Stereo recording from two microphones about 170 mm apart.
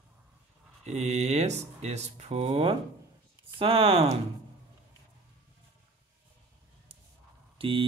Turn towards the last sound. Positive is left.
turn(degrees=-30)  # may be behind; listen again after turning